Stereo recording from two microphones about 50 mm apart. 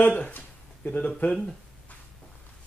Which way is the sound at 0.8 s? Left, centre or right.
Left.